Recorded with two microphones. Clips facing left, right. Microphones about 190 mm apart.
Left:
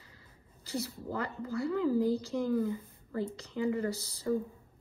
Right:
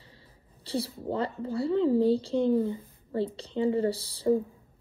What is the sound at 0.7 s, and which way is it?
A woman's voice, 30° right (ahead or behind).